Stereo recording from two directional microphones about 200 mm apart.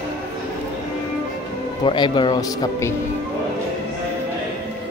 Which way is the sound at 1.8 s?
25° left (ahead or behind).